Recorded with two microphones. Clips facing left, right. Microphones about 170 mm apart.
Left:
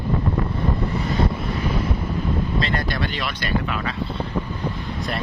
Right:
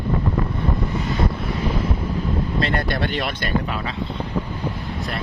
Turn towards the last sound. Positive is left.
turn(degrees=-55)  # may be behind; listen again after turning